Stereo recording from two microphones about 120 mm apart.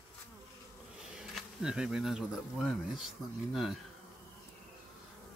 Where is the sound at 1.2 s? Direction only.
5° right (ahead or behind).